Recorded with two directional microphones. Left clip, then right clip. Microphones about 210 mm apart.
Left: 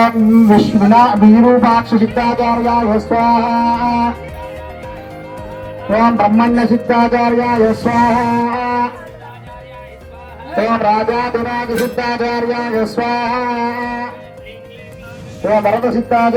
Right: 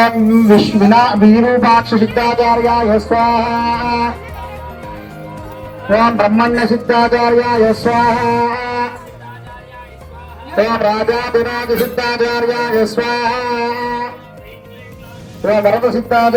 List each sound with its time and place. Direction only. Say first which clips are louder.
0.0 s speech: even; 35° right (ahead or behind)
5.9 s speech: right 1 dB; 35° right (ahead or behind)
10.6 s speech: even; 45° right (ahead or behind)
15.8 s speech: right 1 dB; 50° right (ahead or behind)